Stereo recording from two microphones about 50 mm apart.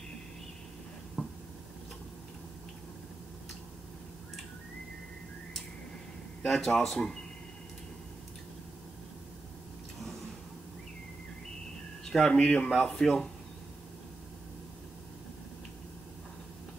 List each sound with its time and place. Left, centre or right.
1.2 s a sound: centre
6.4 s speech: centre
12.1 s speech: centre